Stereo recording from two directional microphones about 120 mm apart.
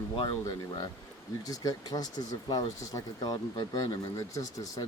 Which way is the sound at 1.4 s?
30° left (ahead or behind).